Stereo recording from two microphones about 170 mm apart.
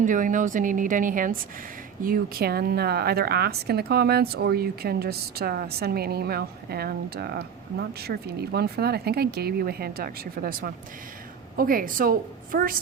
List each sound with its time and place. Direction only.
0.0 s a woman's voice: 50° right (ahead or behind)